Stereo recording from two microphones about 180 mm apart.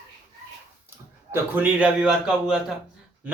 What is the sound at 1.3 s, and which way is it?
A man's voice, 10° right (ahead or behind).